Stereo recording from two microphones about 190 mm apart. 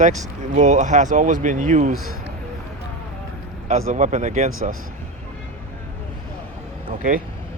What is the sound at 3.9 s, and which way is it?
Speech, 40° right (ahead or behind).